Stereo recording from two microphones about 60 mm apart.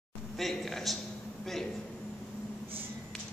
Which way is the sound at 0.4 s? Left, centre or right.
Centre.